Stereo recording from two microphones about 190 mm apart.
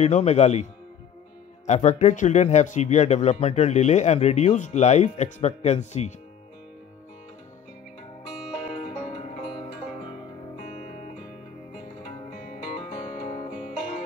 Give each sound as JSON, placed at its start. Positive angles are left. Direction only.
{"t": 0.0, "sound": "speech", "side_deg": 35}
{"t": 1.7, "sound": "speech", "side_deg": 35}
{"t": 8.7, "sound": "music", "side_deg": 35}
{"t": 12.3, "sound": "music", "side_deg": 40}